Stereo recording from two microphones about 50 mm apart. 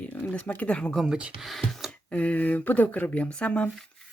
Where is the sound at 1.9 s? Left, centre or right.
Left.